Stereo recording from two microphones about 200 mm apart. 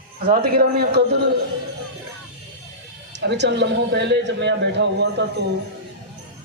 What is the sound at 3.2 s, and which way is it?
A man's voice, 60° right (ahead or behind).